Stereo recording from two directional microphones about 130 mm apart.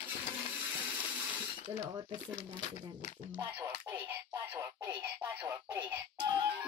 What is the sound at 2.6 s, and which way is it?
Speech, 60° left (ahead or behind).